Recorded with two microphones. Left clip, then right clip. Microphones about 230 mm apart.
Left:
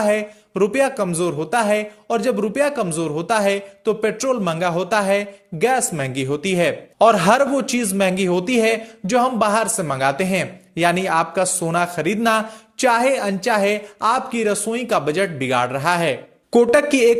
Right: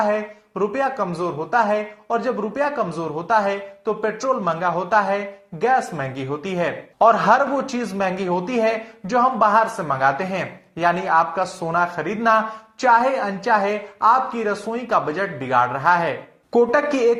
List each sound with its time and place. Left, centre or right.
0.1 s a man's voice: left